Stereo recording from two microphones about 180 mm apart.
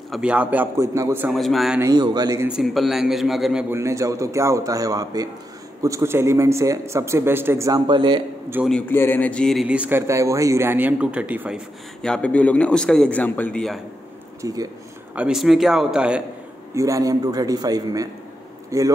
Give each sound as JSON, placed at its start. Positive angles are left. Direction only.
{"t": 0.1, "sound": "speech", "side_deg": -5}
{"t": 1.3, "sound": "a man's voice", "side_deg": 0}
{"t": 1.8, "sound": "a man's voice", "side_deg": -20}
{"t": 2.4, "sound": "a man's voice", "side_deg": 0}
{"t": 3.7, "sound": "speech", "side_deg": -15}
{"t": 8.6, "sound": "speech", "side_deg": 10}
{"t": 12.0, "sound": "a man's voice", "side_deg": 5}
{"t": 14.4, "sound": "speech", "side_deg": -20}
{"t": 15.1, "sound": "a man's voice", "side_deg": -5}
{"t": 16.7, "sound": "a man's voice", "side_deg": -20}